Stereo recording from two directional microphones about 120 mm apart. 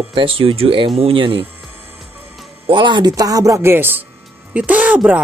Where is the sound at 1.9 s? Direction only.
Centre (ahead or behind).